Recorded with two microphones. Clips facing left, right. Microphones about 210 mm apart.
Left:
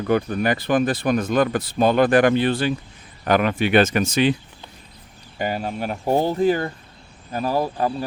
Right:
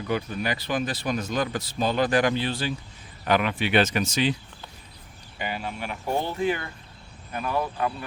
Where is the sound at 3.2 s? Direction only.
45° left (ahead or behind).